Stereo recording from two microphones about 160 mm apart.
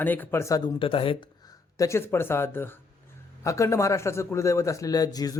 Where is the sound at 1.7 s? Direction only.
20° left (ahead or behind).